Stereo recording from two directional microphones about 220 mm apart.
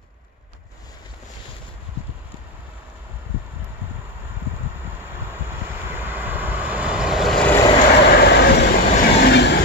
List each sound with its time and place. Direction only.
5.3 s vehicle: 10° right (ahead or behind)
8.0 s train: 50° left (ahead or behind)